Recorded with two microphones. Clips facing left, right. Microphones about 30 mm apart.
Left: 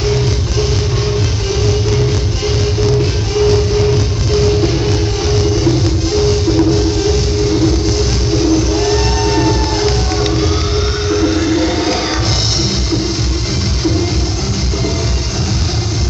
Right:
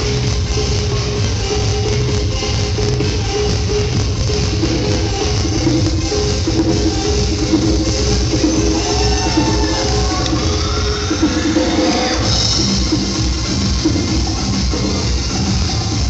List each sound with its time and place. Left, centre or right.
8.5 s vehicle: left
11.1 s music: left